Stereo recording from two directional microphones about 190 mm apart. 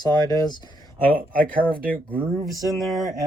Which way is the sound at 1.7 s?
50° right (ahead or behind).